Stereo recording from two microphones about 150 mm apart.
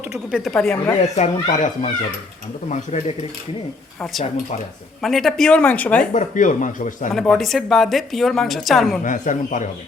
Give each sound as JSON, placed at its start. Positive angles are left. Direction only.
{"t": 0.3, "sound": "a woman's voice", "side_deg": 0}
{"t": 1.0, "sound": "speech", "side_deg": 50}
{"t": 5.0, "sound": "speech", "side_deg": 0}
{"t": 6.1, "sound": "speech", "side_deg": 55}
{"t": 7.1, "sound": "a woman's voice", "side_deg": 0}
{"t": 9.0, "sound": "speech", "side_deg": 60}